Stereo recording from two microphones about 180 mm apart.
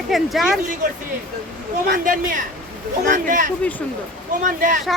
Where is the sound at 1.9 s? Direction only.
50° right (ahead or behind).